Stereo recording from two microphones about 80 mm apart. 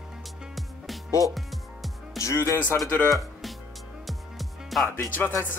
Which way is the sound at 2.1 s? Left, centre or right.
Left.